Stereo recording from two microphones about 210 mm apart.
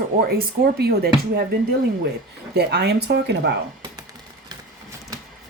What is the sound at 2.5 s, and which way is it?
Speech, 50° right (ahead or behind).